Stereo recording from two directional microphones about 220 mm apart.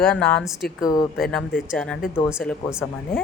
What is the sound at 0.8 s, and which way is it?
Speech, 15° left (ahead or behind).